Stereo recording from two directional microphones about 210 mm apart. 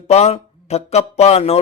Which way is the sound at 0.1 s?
30° left (ahead or behind).